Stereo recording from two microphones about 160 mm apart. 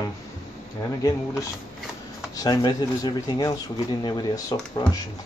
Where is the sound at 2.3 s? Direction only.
25° left (ahead or behind).